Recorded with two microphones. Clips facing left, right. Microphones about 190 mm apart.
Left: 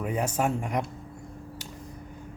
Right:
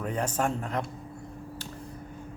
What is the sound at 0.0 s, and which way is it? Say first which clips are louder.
Speech: left 2 dB; 10° left (ahead or behind).